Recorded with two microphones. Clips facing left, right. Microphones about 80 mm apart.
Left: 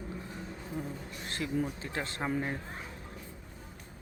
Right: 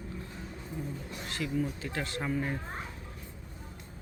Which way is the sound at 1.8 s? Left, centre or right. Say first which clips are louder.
Even; left.